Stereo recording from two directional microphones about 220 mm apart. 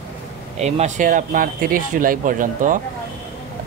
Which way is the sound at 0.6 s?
30° right (ahead or behind).